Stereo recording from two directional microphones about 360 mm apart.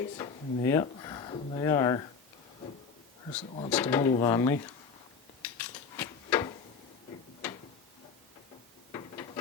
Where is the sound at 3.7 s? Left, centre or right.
Centre.